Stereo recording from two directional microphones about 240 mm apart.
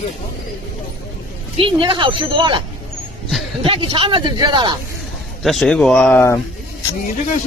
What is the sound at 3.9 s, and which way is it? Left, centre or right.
Speech, right.